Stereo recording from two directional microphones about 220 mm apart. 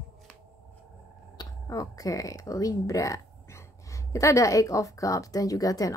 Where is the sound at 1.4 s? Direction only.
15° left (ahead or behind).